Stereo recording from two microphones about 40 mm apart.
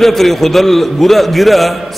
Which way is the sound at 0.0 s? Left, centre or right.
Centre.